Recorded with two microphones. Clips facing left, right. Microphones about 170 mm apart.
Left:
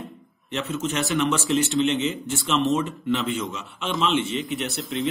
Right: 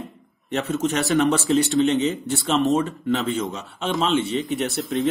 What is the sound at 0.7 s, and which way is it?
Speech, 40° right (ahead or behind).